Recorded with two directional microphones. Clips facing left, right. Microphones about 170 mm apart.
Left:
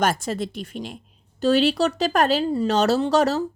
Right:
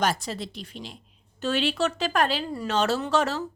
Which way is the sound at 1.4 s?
35° left (ahead or behind).